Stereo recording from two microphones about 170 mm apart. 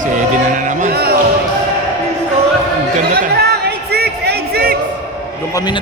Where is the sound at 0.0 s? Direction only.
50° right (ahead or behind).